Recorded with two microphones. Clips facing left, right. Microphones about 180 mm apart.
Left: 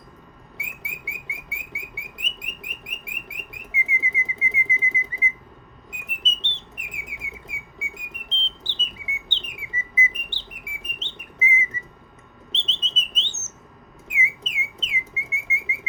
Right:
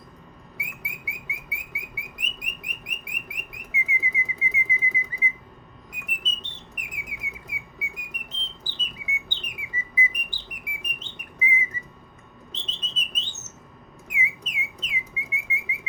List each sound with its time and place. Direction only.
0.5 s bird: 25° left (ahead or behind)
5.9 s a sound: 25° left (ahead or behind)
12.5 s bird: 25° left (ahead or behind)